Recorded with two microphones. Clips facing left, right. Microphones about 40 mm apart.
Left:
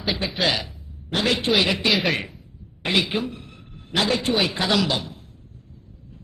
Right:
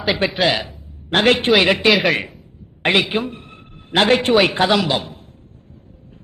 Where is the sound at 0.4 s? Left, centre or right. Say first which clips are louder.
Right 2 dB; right.